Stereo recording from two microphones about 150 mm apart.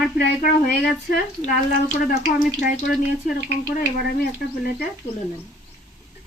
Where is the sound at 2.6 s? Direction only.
90° left.